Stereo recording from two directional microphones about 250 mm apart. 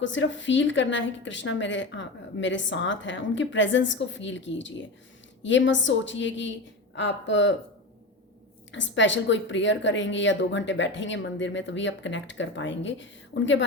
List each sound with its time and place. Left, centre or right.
0.0 s a woman's voice: left
8.7 s a woman's voice: left